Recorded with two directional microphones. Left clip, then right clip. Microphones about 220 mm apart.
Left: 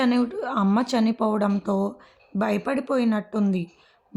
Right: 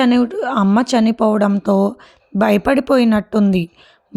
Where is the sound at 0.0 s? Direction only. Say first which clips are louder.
Right 8 dB; 30° right (ahead or behind).